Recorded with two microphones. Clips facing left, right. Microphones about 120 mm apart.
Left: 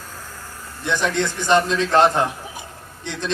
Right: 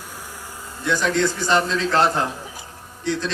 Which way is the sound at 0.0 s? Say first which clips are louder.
Even; 10° right (ahead or behind).